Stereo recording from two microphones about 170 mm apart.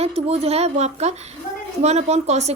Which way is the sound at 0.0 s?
35° right (ahead or behind).